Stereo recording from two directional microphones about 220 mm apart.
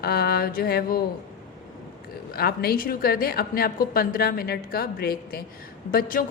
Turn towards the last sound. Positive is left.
turn(degrees=40)  # may be behind; listen again after turning